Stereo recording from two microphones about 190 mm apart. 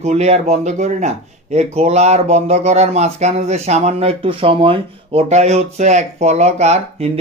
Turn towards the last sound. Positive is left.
turn(degrees=-35)  # may be behind; listen again after turning